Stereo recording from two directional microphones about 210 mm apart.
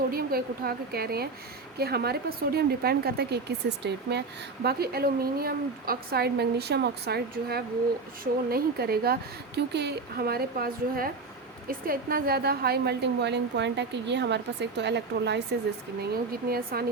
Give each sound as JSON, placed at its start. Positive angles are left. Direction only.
{"t": 0.1, "sound": "a woman's voice", "side_deg": -45}